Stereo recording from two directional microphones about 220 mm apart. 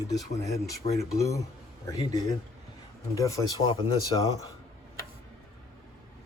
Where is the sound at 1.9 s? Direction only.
15° left (ahead or behind).